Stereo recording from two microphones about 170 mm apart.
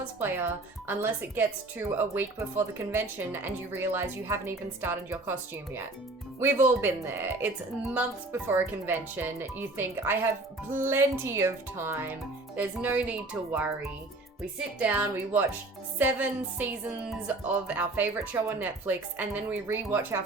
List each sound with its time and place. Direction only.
0.2 s speech: 15° right (ahead or behind)
14.8 s speech: 10° right (ahead or behind)